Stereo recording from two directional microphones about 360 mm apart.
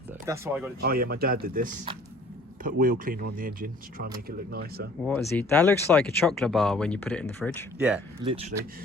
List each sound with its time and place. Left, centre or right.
0.3 s speech: centre
0.8 s speech: right
5.4 s speech: centre
8.2 s speech: centre